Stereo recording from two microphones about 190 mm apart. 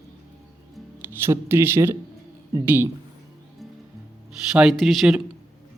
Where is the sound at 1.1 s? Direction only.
10° right (ahead or behind).